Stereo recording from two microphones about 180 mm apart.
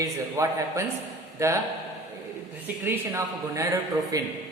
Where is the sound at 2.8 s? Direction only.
15° right (ahead or behind).